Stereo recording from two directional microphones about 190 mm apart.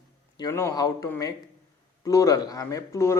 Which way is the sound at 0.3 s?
15° left (ahead or behind).